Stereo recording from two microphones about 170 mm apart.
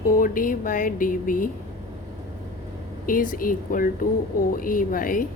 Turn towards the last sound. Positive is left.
turn(degrees=55)  # may be behind; listen again after turning